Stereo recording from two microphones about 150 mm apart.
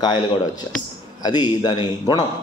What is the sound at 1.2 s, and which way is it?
A man's voice, 30° left (ahead or behind).